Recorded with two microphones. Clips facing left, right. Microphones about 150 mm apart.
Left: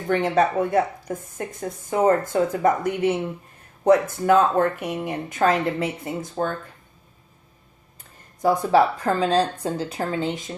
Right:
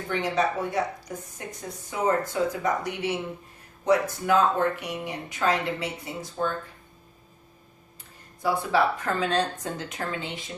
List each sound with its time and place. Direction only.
0.1 s speech: 50° left (ahead or behind)
8.4 s speech: 45° left (ahead or behind)